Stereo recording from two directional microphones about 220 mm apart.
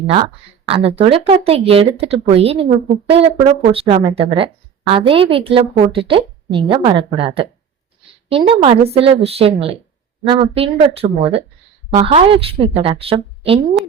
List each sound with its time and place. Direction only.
0.6 s speech: 25° right (ahead or behind)